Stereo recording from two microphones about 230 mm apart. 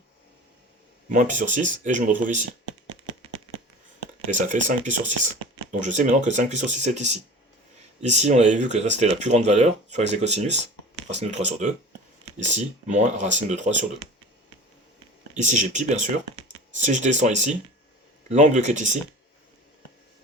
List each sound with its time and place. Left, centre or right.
1.1 s speech: right
4.3 s speech: right
15.4 s speech: right